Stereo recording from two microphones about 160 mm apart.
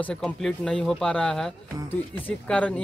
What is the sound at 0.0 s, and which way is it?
Speech, 5° left (ahead or behind).